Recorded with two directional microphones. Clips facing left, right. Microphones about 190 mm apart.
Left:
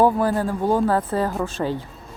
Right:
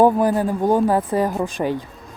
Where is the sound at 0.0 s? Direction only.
15° right (ahead or behind).